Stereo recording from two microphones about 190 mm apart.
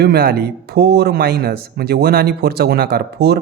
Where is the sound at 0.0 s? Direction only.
55° right (ahead or behind).